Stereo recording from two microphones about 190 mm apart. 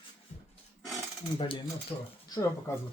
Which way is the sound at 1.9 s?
25° left (ahead or behind).